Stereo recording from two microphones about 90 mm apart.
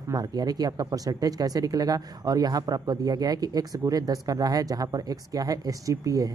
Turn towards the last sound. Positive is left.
turn(degrees=-40)  # may be behind; listen again after turning